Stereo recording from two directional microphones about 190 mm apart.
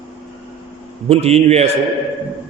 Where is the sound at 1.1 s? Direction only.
35° right (ahead or behind).